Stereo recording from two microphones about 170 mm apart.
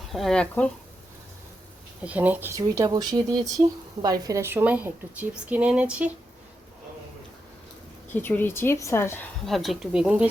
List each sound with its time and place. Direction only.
0.1 s speech: centre (ahead or behind)
2.0 s speech: 10° right (ahead or behind)
8.1 s a woman's voice: 10° left (ahead or behind)
9.5 s speech: centre (ahead or behind)